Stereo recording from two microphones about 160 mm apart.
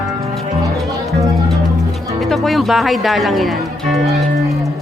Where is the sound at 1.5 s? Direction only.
Centre (ahead or behind).